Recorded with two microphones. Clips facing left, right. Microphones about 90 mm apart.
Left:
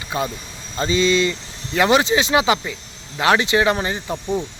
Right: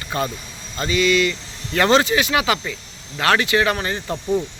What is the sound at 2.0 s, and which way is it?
Speech, 25° left (ahead or behind).